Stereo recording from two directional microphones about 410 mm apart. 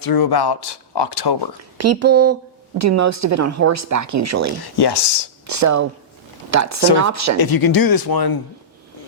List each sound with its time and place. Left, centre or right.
0.0 s speech: left
1.8 s speech: right
4.6 s speech: left
5.5 s speech: right
7.3 s speech: left